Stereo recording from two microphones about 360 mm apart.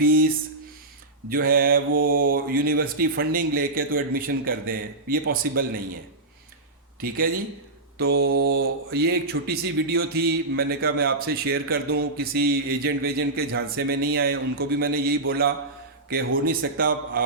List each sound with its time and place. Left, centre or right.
0.0 s a sound: right
1.3 s speech: right
7.9 s speech: right